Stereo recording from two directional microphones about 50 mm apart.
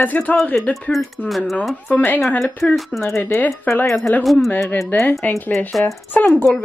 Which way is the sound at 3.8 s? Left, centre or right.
Left.